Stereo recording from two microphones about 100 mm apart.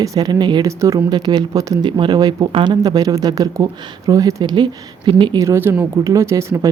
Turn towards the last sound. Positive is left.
turn(degrees=-30)  # may be behind; listen again after turning